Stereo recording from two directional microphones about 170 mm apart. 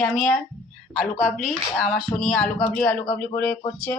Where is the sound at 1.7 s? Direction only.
Centre (ahead or behind).